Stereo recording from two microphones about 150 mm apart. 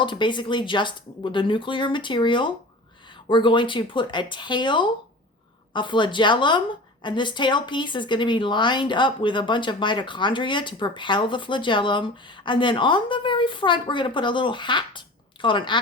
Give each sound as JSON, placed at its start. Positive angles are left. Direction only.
{"t": 0.0, "sound": "speech", "side_deg": 30}